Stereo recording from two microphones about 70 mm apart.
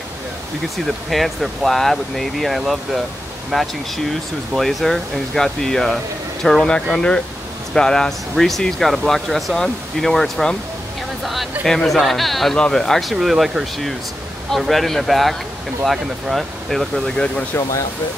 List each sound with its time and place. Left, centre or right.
0.8 s speech: centre
11.6 s speech: centre
17.1 s speech: centre
17.6 s speech: left